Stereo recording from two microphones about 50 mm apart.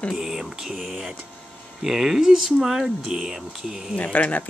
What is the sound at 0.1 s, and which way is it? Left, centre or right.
Speech, centre.